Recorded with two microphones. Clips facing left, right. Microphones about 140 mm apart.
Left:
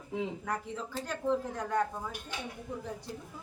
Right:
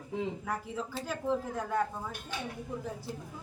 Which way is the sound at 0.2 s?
5° right (ahead or behind).